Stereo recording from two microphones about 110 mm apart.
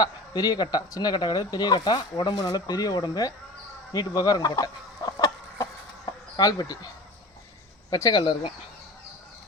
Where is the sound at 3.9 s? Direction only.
35° left (ahead or behind).